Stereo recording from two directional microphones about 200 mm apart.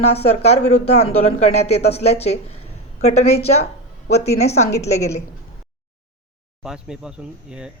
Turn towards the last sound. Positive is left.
turn(degrees=-5)  # may be behind; listen again after turning